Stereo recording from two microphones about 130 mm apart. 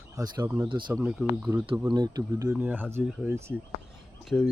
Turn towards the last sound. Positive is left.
turn(degrees=0)  # may be behind; listen again after turning